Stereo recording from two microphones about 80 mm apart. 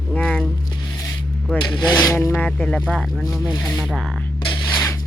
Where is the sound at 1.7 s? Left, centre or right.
Centre.